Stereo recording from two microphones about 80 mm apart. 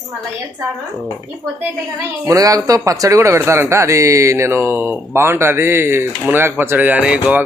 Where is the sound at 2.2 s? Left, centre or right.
Right.